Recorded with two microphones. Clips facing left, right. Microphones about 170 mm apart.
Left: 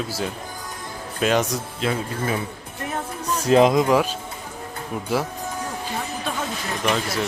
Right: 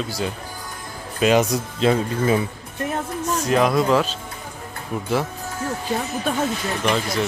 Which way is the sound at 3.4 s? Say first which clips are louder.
Left 3 dB; 25° left (ahead or behind).